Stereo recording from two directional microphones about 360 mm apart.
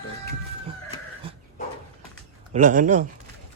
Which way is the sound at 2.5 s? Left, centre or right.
Right.